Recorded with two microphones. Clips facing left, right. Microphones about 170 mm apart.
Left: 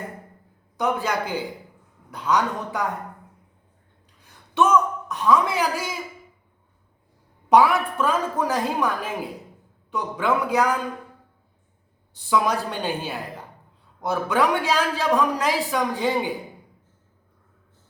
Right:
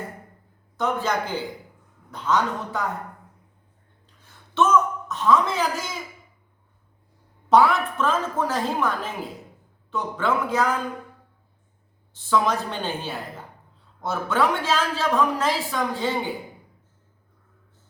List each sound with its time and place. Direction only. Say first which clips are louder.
0.8 s a man's voice: left 1 dB; 10° left (ahead or behind)
4.2 s a sound: left 1 dB; 15° left (ahead or behind)
7.5 s a man's voice: left 1 dB; 10° left (ahead or behind)
12.3 s a man's voice: even; 10° left (ahead or behind)